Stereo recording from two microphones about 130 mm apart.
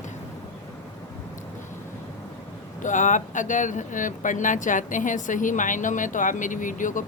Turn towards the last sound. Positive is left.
turn(degrees=85)